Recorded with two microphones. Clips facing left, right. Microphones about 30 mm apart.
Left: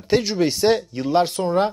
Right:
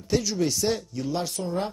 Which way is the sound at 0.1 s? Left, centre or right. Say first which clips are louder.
Left 6 dB; left.